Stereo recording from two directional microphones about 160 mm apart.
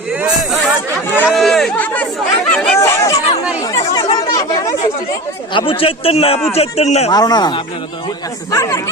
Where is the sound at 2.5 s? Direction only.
5° left (ahead or behind).